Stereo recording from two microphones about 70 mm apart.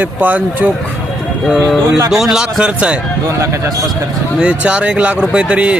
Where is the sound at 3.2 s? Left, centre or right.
Right.